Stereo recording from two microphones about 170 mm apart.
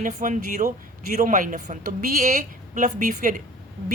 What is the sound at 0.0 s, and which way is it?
A woman's voice, 50° right (ahead or behind).